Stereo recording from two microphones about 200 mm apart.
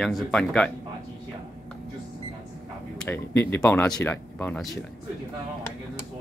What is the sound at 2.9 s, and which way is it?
Speech, 10° left (ahead or behind).